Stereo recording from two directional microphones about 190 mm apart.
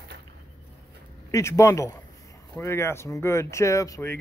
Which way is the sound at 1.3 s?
15° left (ahead or behind).